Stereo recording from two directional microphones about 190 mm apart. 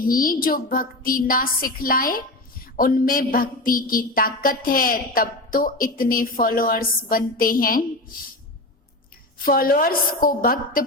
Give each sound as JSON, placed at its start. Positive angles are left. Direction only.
{"t": 0.1, "sound": "a woman's voice", "side_deg": 50}
{"t": 9.4, "sound": "a woman's voice", "side_deg": 50}